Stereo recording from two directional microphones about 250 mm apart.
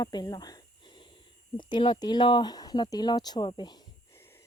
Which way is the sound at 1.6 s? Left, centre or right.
Centre.